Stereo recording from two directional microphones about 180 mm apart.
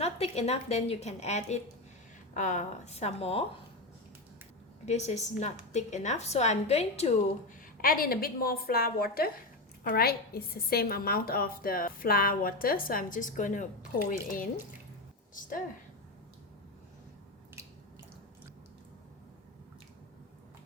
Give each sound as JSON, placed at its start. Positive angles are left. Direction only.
{"t": 0.0, "sound": "a woman's voice", "side_deg": 35}
{"t": 4.9, "sound": "a woman's voice", "side_deg": 40}
{"t": 7.8, "sound": "a woman's voice", "side_deg": 55}
{"t": 15.4, "sound": "a woman's voice", "side_deg": 50}